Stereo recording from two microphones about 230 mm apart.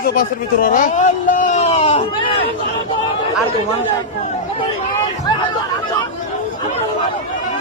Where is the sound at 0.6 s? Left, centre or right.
Left.